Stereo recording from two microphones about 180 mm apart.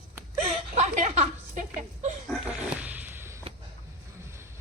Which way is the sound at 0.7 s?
40° right (ahead or behind).